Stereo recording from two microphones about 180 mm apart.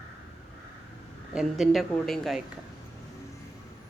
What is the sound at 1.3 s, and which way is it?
Speech, centre (ahead or behind).